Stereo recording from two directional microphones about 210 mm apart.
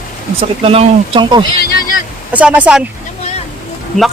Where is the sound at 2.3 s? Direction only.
5° right (ahead or behind).